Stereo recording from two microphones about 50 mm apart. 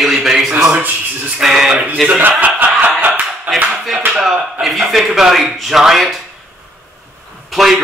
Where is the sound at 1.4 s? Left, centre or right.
Centre.